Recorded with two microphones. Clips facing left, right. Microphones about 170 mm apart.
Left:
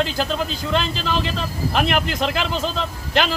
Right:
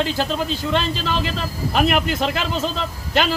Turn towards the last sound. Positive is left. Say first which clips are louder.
# even
turn(degrees=0)  # may be behind; listen again after turning